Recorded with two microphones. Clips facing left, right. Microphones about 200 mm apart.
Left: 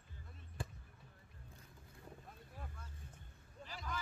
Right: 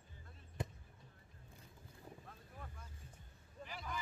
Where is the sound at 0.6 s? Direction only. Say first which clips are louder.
Right 3 dB; 20° right (ahead or behind).